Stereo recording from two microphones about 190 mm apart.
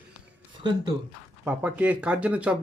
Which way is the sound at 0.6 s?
25° right (ahead or behind).